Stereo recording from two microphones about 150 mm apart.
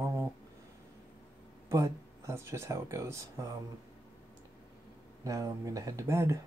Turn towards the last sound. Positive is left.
turn(degrees=-20)  # may be behind; listen again after turning